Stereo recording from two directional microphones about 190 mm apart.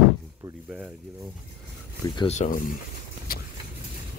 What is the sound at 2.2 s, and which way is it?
Speech, 35° left (ahead or behind).